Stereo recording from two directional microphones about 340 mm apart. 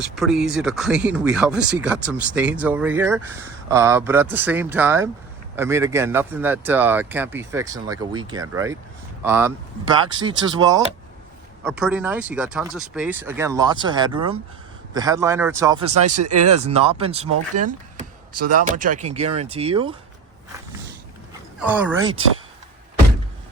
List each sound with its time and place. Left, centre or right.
0.2 s speech: centre
16.0 s speech: right
16.6 s speech: centre
17.2 s speech: right
17.6 s speech: right
21.6 s speech: centre